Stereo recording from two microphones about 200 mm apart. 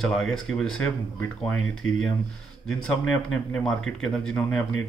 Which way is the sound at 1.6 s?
90° left.